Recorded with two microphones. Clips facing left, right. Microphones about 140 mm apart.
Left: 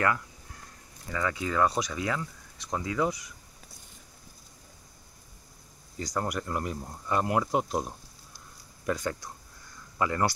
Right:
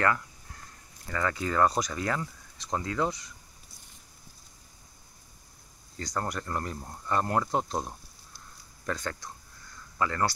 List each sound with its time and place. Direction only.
1.1 s speech: 5° left (ahead or behind)
5.9 s speech: 10° left (ahead or behind)